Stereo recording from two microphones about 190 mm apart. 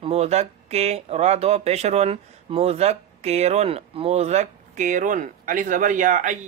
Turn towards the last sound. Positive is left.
turn(degrees=-40)  # may be behind; listen again after turning